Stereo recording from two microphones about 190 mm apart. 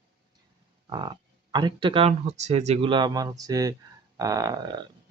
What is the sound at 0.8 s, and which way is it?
Speech, 25° right (ahead or behind).